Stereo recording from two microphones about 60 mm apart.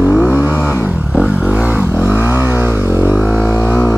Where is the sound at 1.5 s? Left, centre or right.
Right.